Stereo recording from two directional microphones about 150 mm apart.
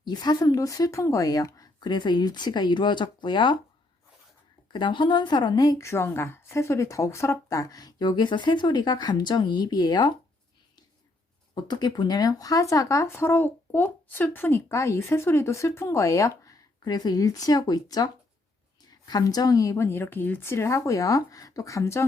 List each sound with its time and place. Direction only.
0.0 s speech: 30° left (ahead or behind)
4.7 s speech: 30° left (ahead or behind)
11.5 s speech: 30° left (ahead or behind)